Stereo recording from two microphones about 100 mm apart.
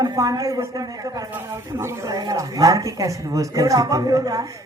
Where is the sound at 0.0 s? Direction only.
35° right (ahead or behind).